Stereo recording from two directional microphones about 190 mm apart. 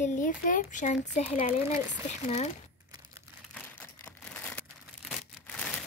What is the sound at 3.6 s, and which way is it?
Crumpling, 5° left (ahead or behind).